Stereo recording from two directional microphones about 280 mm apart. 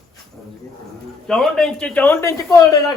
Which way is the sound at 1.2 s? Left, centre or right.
Centre.